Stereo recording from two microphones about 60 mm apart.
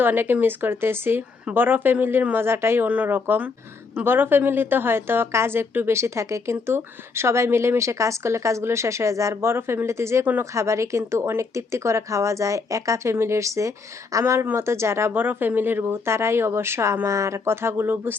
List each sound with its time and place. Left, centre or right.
0.0 s a woman's voice: right
2.8 s a woman's voice: right
14.5 s a woman's voice: right
15.1 s a woman's voice: right